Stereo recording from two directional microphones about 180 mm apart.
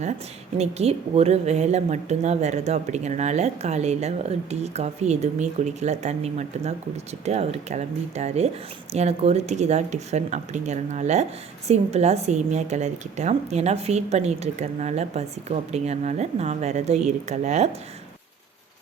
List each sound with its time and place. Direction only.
0.6 s a woman's voice: 35° right (ahead or behind)